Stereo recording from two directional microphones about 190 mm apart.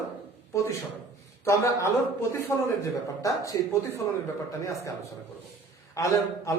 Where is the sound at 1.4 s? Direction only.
15° left (ahead or behind).